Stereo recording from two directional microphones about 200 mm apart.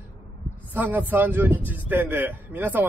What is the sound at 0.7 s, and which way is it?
A man's voice, 10° right (ahead or behind).